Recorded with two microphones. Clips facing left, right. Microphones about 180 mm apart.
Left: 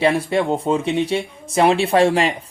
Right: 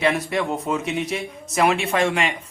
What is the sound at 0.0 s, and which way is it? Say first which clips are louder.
Speech: left 4 dB; 30° left (ahead or behind).